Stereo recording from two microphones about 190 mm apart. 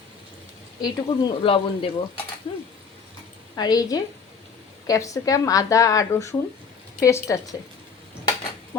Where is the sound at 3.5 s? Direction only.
20° left (ahead or behind).